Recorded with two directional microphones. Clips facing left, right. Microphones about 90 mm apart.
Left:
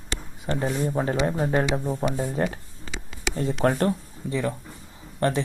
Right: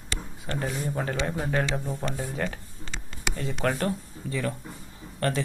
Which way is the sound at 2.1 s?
30° left (ahead or behind).